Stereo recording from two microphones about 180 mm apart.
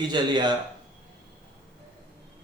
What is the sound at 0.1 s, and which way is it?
Speech, 25° right (ahead or behind).